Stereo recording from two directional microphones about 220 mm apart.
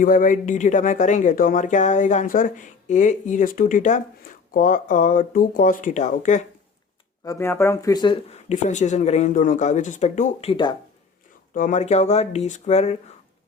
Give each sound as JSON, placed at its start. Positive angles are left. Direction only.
{"t": 0.0, "sound": "speech", "side_deg": 40}
{"t": 7.3, "sound": "speech", "side_deg": 10}
{"t": 11.5, "sound": "speech", "side_deg": 35}